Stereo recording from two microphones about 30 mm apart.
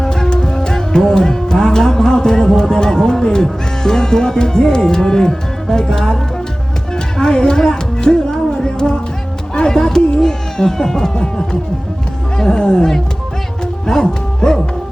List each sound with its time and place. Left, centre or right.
0.0 s music: left
10.2 s speech: left
12.4 s music: left